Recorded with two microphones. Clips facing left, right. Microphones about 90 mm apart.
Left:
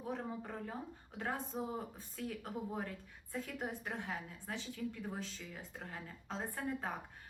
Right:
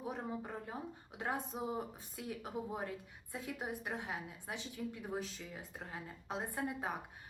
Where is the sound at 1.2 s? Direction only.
10° right (ahead or behind).